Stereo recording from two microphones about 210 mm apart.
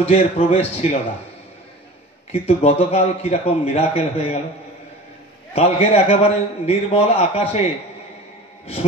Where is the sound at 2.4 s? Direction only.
30° left (ahead or behind).